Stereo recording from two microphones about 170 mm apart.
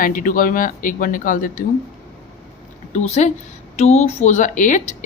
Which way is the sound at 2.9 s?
40° left (ahead or behind).